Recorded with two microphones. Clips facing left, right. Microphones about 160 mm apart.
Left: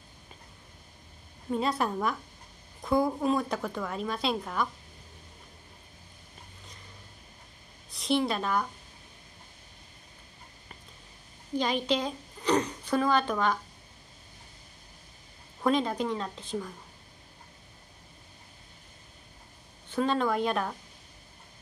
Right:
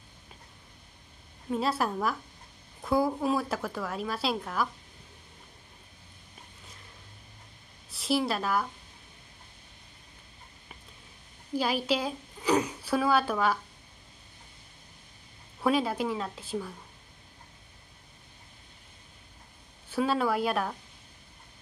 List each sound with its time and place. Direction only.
1.5 s a woman's voice: centre (ahead or behind)
7.9 s a woman's voice: 5° right (ahead or behind)
11.5 s a woman's voice: 5° right (ahead or behind)
15.6 s speech: 5° right (ahead or behind)
19.9 s a woman's voice: 5° right (ahead or behind)